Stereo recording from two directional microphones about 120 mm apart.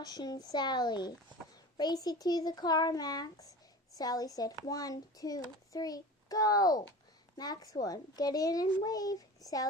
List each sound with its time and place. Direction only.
0.0 s a child's voice: 35° left (ahead or behind)